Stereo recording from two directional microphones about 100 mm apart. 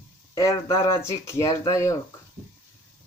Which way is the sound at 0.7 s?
30° left (ahead or behind).